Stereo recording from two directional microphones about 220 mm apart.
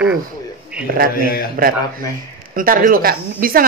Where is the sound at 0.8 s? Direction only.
40° right (ahead or behind).